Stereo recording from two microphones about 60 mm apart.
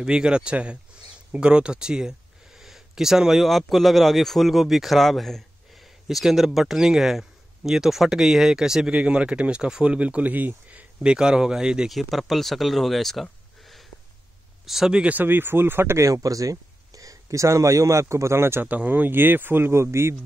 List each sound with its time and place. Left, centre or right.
0.0 s speech: centre
11.9 s speech: centre
14.7 s speech: centre
15.1 s speech: right
16.0 s speech: right
18.7 s speech: right